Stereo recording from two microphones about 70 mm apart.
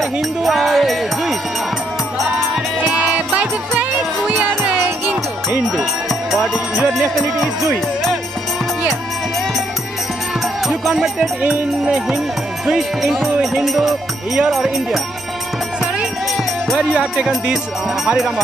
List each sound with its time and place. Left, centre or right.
0.4 s music: centre
3.0 s music: centre
6.3 s music: centre
10.7 s music: centre
11.4 s speech: centre
16.7 s speech: centre